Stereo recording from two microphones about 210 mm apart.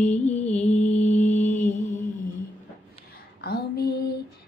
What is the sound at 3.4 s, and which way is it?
Female singing, 45° left (ahead or behind).